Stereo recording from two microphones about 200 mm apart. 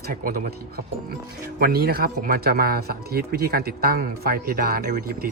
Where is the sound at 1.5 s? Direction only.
50° right (ahead or behind).